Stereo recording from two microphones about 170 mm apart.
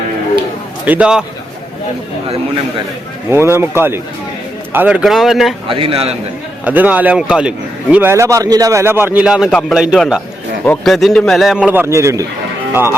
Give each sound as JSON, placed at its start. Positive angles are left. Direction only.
{"t": 0.9, "sound": "speech", "side_deg": -5}
{"t": 3.2, "sound": "a man's voice", "side_deg": -15}
{"t": 5.6, "sound": "a man's voice", "side_deg": -30}
{"t": 6.7, "sound": "a man's voice", "side_deg": -10}